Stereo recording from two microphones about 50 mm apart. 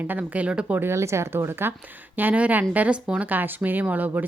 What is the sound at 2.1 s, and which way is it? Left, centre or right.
A woman's voice, right.